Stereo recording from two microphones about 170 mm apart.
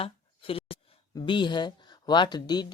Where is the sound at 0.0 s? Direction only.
35° left (ahead or behind).